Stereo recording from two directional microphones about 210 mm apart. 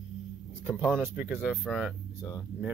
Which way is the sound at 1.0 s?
10° right (ahead or behind).